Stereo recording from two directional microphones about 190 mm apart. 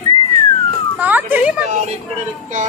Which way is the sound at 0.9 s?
10° right (ahead or behind).